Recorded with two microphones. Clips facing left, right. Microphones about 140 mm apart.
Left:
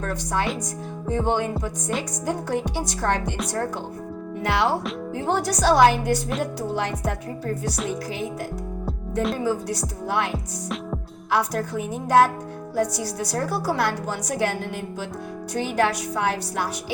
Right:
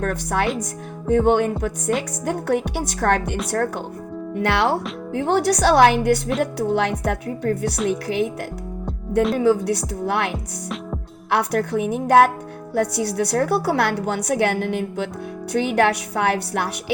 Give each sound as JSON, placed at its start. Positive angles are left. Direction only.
{"t": 0.0, "sound": "a woman's voice", "side_deg": -60}
{"t": 4.4, "sound": "a woman's voice", "side_deg": -70}
{"t": 9.4, "sound": "a woman's voice", "side_deg": -65}